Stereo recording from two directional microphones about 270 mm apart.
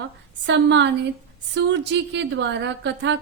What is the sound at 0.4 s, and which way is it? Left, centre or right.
A woman's voice, right.